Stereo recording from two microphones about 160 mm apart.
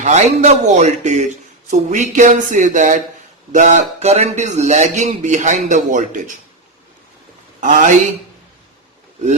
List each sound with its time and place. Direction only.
0.0 s speech: 45° right (ahead or behind)
7.6 s speech: 55° right (ahead or behind)